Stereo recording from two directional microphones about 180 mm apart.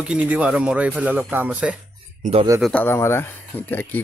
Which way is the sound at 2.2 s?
35° right (ahead or behind).